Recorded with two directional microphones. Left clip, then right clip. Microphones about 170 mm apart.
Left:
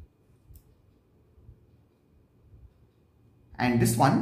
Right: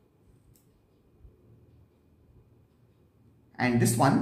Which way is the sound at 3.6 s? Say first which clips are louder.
Left 1 dB; 15° left (ahead or behind).